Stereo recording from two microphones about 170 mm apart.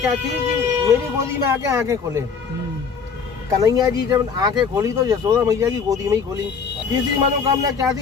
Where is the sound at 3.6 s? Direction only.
20° right (ahead or behind).